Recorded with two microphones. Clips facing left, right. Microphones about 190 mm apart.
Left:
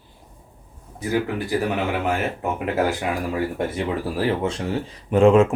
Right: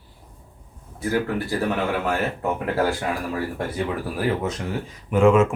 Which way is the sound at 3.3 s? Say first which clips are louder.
Left 2 dB; 20° left (ahead or behind).